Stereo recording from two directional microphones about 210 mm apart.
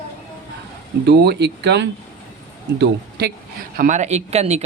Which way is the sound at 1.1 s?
50° right (ahead or behind).